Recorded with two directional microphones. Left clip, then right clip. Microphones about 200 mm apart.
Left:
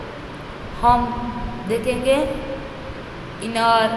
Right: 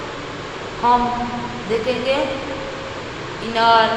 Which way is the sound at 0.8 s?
50° left (ahead or behind).